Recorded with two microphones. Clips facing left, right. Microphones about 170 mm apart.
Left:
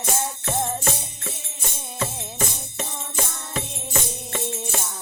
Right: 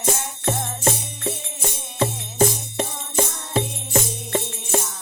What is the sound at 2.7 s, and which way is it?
Music, 30° right (ahead or behind).